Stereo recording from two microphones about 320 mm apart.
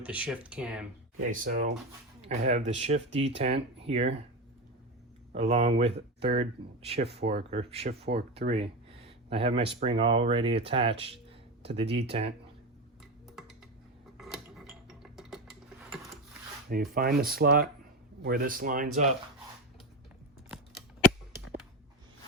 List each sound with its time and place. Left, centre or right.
0.0 s speech: centre
1.2 s speech: right
5.3 s speech: centre
14.2 s a sound: centre
16.6 s speech: right